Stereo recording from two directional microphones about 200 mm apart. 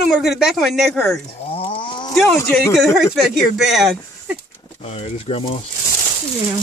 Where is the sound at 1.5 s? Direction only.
25° left (ahead or behind).